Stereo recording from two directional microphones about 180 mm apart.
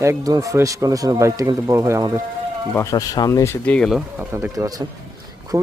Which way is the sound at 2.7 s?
15° left (ahead or behind).